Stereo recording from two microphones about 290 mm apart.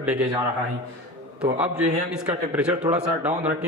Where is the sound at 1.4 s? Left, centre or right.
Centre.